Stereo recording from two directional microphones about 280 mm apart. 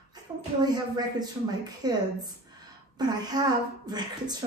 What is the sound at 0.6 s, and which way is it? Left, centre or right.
A woman's voice, centre.